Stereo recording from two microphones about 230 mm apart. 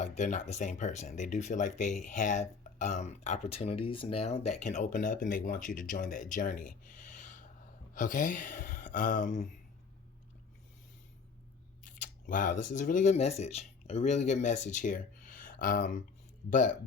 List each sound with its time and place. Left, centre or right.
0.0 s speech: left
11.9 s scissors: left
12.6 s speech: left